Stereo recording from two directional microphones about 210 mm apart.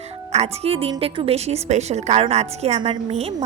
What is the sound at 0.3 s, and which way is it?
A woman's voice, 30° right (ahead or behind).